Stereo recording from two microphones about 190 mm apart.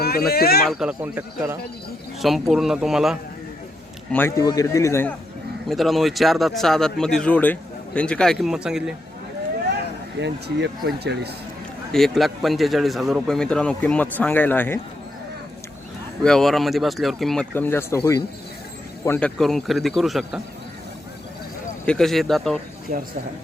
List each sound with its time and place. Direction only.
0.0 s speech: 55° left (ahead or behind)
0.7 s a man's voice: 5° right (ahead or behind)
4.1 s a man's voice: 10° left (ahead or behind)
5.6 s a man's voice: centre (ahead or behind)
10.2 s speech: 65° right (ahead or behind)
11.9 s a man's voice: centre (ahead or behind)
16.2 s a man's voice: 5° left (ahead or behind)
21.8 s a man's voice: centre (ahead or behind)
22.9 s speech: 50° right (ahead or behind)